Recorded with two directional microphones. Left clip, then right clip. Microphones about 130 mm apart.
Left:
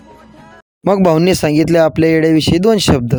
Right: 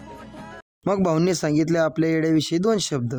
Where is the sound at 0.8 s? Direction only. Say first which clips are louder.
Left 10 dB; 65° left (ahead or behind).